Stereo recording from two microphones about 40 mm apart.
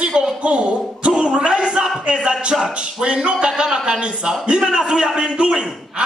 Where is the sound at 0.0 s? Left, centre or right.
Right.